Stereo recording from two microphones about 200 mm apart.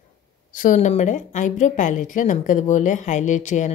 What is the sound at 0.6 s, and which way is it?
A woman's voice, 40° left (ahead or behind).